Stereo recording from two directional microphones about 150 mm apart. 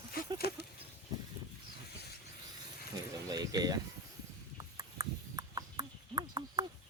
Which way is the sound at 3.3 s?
25° right (ahead or behind).